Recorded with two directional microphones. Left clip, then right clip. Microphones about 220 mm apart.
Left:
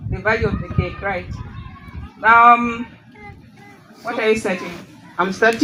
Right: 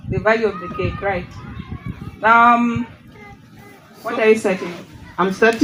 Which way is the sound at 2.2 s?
45° right (ahead or behind).